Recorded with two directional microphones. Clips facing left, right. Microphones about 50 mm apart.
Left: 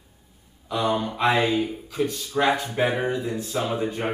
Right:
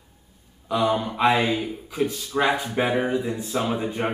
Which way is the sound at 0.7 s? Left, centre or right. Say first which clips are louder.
Right 2 dB; centre.